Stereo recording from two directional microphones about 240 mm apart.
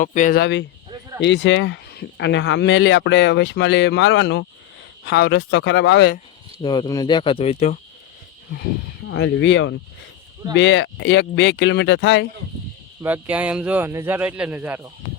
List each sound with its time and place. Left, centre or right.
0.0 s speech: left
6.6 s speech: centre
9.0 s speech: left
13.0 s speech: centre